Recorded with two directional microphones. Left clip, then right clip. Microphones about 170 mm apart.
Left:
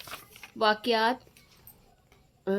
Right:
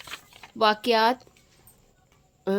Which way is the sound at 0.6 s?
30° right (ahead or behind).